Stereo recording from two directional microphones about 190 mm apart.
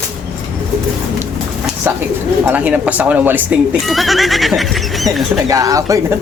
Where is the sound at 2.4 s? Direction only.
10° right (ahead or behind).